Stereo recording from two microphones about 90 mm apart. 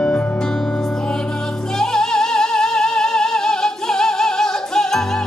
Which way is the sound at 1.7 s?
5° left (ahead or behind).